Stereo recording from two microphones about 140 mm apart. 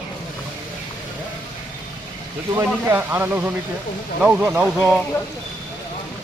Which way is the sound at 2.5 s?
20° right (ahead or behind).